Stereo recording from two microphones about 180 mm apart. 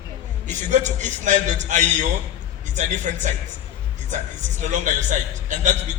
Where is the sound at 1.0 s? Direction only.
45° right (ahead or behind).